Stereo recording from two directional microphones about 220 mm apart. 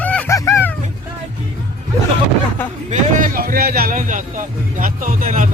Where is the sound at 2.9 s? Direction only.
35° right (ahead or behind).